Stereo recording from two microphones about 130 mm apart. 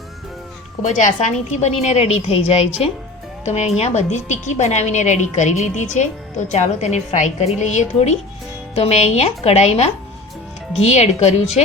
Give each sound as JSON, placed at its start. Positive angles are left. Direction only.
{"t": 0.8, "sound": "a woman's voice", "side_deg": 80}